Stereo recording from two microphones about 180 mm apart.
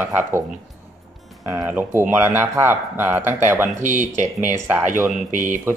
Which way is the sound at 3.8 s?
45° right (ahead or behind).